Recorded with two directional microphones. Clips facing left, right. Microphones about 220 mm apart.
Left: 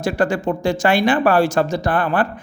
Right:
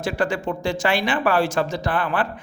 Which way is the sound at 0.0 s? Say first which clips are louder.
Left 4 dB; 45° left (ahead or behind).